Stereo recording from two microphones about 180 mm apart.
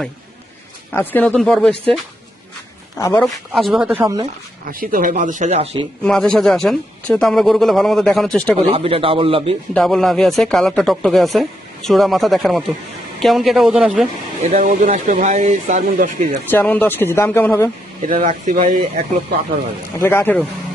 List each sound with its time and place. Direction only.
0.9 s speech: 10° left (ahead or behind)
3.0 s speech: 15° left (ahead or behind)
3.2 s speech: centre (ahead or behind)
4.0 s speech: 25° right (ahead or behind)
4.7 s speech: 50° right (ahead or behind); by 5.8 s 35° right (ahead or behind)
6.0 s speech: 5° left (ahead or behind)
8.5 s a man's voice: 35° right (ahead or behind)
9.7 s speech: centre (ahead or behind)
14.4 s speech: 45° right (ahead or behind)
16.5 s speech: 10° left (ahead or behind)
18.0 s speech: 45° right (ahead or behind)
20.0 s speech: 15° left (ahead or behind)